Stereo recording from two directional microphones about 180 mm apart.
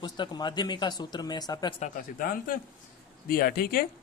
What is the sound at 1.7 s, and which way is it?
A man's voice, 45° left (ahead or behind).